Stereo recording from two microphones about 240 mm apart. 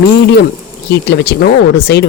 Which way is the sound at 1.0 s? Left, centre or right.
Left.